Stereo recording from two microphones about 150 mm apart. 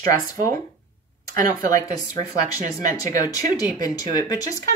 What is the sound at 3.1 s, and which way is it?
Speech, 25° left (ahead or behind).